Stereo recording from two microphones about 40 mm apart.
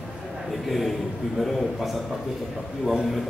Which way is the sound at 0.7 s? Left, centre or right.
Centre.